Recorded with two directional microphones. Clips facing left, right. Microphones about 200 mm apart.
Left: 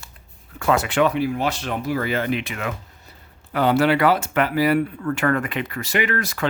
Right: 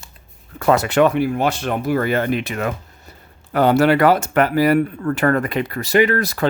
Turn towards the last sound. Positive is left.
turn(degrees=-35)  # may be behind; listen again after turning